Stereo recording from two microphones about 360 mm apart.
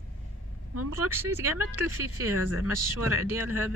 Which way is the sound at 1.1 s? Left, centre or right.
Centre.